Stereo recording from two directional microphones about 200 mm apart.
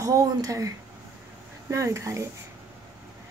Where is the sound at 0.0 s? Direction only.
15° right (ahead or behind).